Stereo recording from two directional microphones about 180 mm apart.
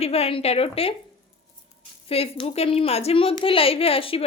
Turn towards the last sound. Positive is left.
turn(degrees=30)  # may be behind; listen again after turning